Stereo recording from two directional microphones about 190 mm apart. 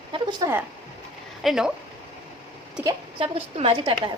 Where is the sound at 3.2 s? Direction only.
30° right (ahead or behind).